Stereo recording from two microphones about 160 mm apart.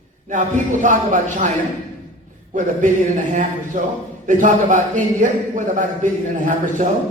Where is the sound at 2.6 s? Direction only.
50° right (ahead or behind).